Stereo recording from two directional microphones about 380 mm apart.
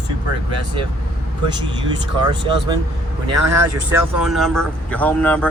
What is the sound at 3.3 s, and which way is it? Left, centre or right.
Speech, right.